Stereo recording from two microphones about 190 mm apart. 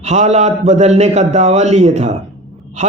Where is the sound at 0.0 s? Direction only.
35° right (ahead or behind).